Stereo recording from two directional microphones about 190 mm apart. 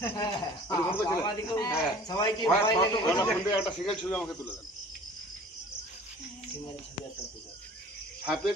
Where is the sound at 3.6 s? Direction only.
Centre (ahead or behind).